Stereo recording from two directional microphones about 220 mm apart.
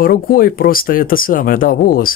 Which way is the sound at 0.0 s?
40° left (ahead or behind).